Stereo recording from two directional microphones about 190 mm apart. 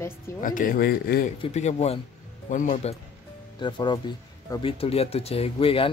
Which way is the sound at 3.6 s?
25° left (ahead or behind).